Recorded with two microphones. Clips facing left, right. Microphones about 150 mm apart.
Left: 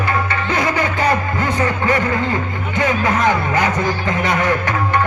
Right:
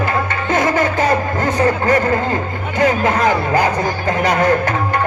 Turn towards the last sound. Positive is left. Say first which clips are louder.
# right 3 dB
turn(degrees=-40)  # may be behind; listen again after turning